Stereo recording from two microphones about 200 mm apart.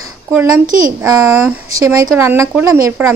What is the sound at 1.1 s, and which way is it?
Speech, 15° right (ahead or behind).